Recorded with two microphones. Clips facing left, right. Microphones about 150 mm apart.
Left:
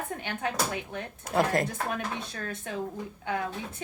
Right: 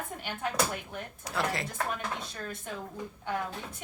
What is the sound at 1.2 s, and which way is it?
Speech, 50° left (ahead or behind).